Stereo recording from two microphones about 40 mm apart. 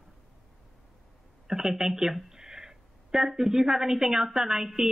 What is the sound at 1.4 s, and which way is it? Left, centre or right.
Speech, centre.